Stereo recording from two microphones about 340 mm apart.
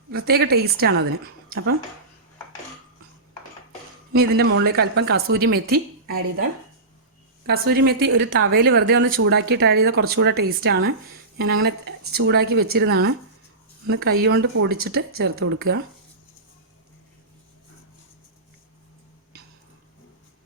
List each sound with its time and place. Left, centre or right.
0.1 s speech: right
4.1 s speech: right
7.4 s speech: right